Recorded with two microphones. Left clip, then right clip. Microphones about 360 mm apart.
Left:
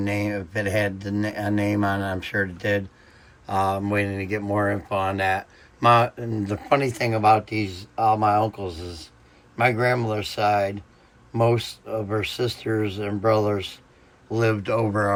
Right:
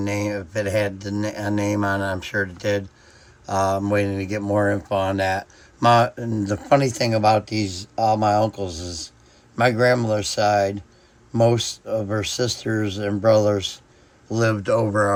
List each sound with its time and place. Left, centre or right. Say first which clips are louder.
0.0 s speech: right 1 dB; centre
11.9 s speech: right 3 dB; right
12.1 s speech: right 2 dB; centre